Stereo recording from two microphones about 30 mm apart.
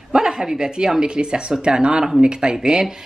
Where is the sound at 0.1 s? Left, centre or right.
Right.